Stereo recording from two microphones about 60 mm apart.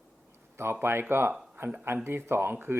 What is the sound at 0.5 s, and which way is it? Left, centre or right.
Speech, right.